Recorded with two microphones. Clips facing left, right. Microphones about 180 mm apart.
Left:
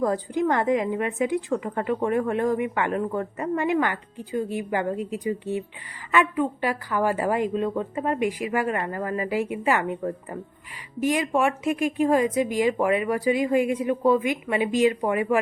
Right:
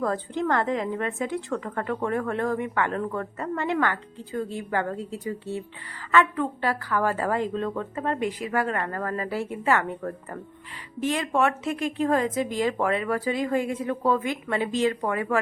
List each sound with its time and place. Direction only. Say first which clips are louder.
0.0 s a woman's voice: left 3 dB; 15° left (ahead or behind)